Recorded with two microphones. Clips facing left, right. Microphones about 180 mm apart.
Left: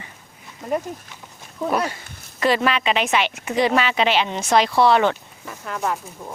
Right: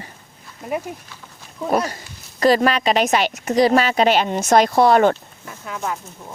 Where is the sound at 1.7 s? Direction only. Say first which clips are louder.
Right 3 dB; 40° right (ahead or behind).